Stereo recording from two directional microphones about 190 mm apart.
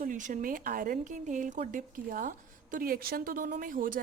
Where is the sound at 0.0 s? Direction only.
40° right (ahead or behind).